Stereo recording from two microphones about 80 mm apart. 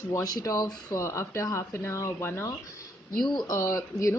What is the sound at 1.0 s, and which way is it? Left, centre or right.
A woman's voice, left.